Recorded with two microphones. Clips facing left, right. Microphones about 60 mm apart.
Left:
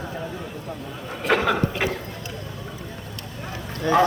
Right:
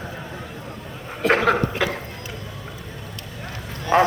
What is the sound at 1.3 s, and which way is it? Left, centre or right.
Chuckle, right.